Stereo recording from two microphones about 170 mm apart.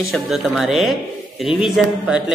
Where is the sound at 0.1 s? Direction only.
Centre (ahead or behind).